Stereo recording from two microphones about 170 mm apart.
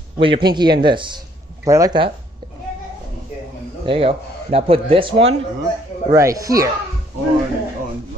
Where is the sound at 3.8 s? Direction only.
35° right (ahead or behind).